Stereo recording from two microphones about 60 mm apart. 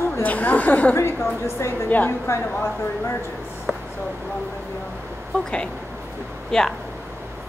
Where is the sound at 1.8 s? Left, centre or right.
Left.